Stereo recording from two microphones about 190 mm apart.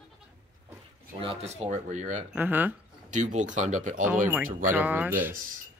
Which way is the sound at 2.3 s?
10° right (ahead or behind).